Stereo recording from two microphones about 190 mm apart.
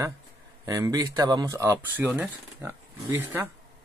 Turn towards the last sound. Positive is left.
turn(degrees=-10)  # may be behind; listen again after turning